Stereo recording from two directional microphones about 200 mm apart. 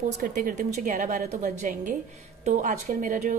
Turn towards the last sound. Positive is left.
turn(degrees=-40)  # may be behind; listen again after turning